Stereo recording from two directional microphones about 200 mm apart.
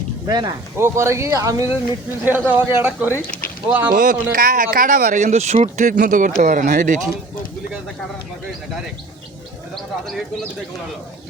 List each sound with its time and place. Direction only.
0.3 s speech: 20° right (ahead or behind)
3.9 s speech: 45° right (ahead or behind)
9.7 s a man's voice: centre (ahead or behind)